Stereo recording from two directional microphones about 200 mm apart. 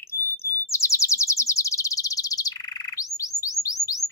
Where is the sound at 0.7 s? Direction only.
15° left (ahead or behind).